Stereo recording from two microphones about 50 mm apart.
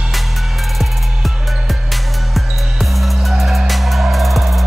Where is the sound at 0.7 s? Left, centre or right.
Centre.